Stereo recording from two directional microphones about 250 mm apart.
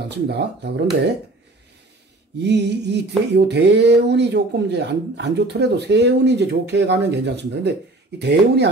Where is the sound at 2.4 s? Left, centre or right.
Right.